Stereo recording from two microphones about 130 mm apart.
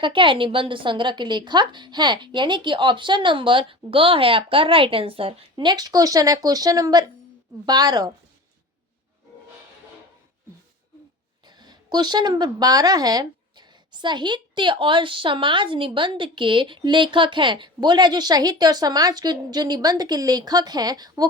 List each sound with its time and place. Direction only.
0.0 s a woman's voice: 40° right (ahead or behind)
11.4 s a woman's voice: 35° right (ahead or behind)